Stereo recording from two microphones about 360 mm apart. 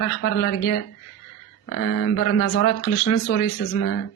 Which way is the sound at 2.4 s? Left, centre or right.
Left.